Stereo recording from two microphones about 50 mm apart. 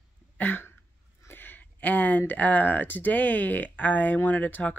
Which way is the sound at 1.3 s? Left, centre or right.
Left.